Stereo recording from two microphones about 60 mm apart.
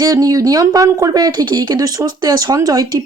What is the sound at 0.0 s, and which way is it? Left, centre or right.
A woman's voice, right.